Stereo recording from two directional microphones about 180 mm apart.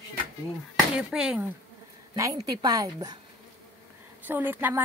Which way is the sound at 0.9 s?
5° right (ahead or behind).